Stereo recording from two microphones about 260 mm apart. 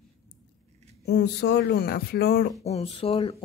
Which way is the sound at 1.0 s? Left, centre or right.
Left.